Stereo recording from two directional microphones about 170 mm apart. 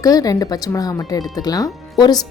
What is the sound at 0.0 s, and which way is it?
Speech, 20° left (ahead or behind).